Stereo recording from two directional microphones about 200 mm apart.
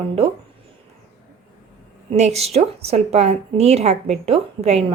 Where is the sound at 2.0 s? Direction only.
35° right (ahead or behind).